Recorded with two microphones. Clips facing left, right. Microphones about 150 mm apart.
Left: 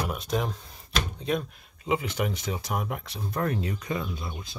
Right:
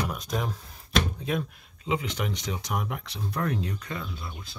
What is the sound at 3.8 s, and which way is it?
Speech, 15° left (ahead or behind).